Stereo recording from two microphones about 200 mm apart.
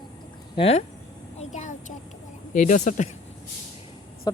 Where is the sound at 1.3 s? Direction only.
35° left (ahead or behind).